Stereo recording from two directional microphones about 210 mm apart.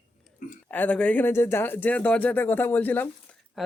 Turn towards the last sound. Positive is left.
turn(degrees=5)  # may be behind; listen again after turning